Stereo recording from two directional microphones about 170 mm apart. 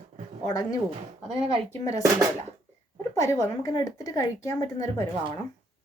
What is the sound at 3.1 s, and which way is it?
Speech, 20° left (ahead or behind).